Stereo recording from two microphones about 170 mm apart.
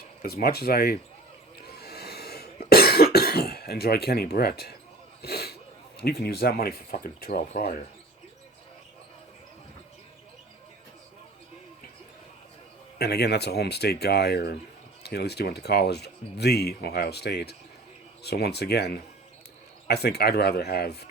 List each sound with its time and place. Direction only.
0.2 s speech: 60° left (ahead or behind)
1.6 s cough: 70° left (ahead or behind)
5.2 s a sound: 70° left (ahead or behind)
6.0 s speech: 65° left (ahead or behind)
13.0 s speech: 70° left (ahead or behind)